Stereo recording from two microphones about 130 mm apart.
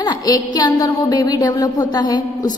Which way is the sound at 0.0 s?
30° left (ahead or behind).